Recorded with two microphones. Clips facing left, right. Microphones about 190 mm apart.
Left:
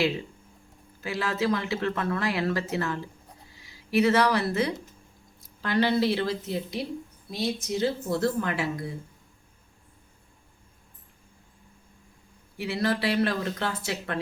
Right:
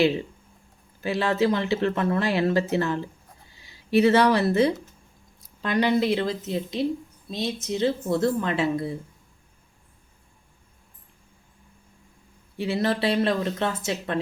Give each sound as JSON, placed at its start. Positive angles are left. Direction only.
{"t": 1.0, "sound": "speech", "side_deg": -25}
{"t": 12.5, "sound": "speech", "side_deg": -25}